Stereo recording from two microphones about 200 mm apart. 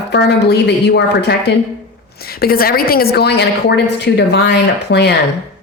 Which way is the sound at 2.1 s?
50° left (ahead or behind).